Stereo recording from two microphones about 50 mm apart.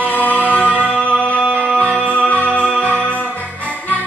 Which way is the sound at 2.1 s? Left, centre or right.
Left.